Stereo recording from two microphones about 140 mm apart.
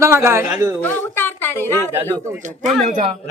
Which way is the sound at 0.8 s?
15° left (ahead or behind).